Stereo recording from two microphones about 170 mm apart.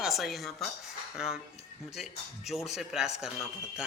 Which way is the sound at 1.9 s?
Centre (ahead or behind).